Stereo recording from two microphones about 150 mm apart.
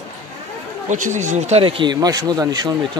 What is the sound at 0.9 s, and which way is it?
Speech, 55° right (ahead or behind).